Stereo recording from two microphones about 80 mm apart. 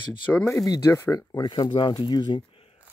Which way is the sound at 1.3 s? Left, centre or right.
Left.